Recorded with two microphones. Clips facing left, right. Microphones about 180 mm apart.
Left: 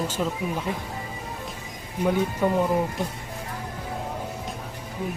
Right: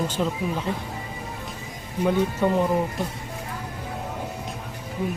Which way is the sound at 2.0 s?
10° left (ahead or behind).